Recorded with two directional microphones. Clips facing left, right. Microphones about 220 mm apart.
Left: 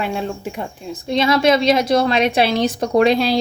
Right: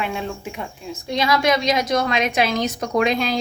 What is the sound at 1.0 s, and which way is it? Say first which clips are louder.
A woman's voice: left 4 dB; 25° left (ahead or behind).